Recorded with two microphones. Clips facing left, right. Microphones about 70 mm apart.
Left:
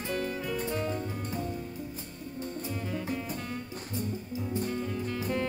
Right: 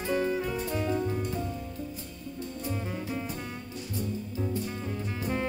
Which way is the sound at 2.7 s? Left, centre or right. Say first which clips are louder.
Even; centre.